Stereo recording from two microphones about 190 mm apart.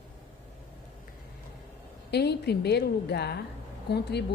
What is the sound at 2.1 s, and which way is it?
A woman's voice, 60° left (ahead or behind).